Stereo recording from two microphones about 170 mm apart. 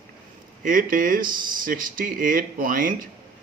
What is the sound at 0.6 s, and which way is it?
Speech, 55° right (ahead or behind).